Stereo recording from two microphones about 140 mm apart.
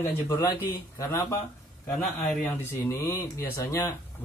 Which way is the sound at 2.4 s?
15° left (ahead or behind).